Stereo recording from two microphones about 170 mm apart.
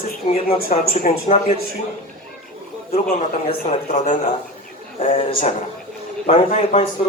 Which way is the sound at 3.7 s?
40° left (ahead or behind).